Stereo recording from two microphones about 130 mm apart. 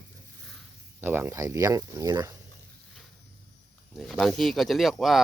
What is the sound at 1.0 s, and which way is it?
Speech, 15° right (ahead or behind).